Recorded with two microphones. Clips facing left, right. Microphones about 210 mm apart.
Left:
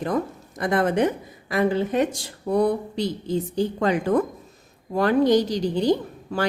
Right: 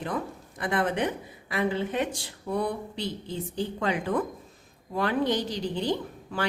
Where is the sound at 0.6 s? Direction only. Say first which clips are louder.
Left 6 dB; 45° left (ahead or behind).